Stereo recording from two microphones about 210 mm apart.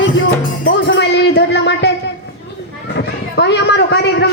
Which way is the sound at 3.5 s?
55° left (ahead or behind).